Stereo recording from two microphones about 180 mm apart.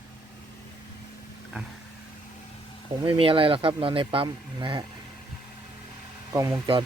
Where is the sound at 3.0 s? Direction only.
30° right (ahead or behind).